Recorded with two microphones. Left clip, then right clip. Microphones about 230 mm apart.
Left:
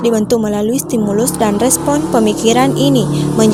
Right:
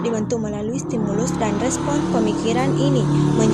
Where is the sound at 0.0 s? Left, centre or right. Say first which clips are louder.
Left 9 dB; left.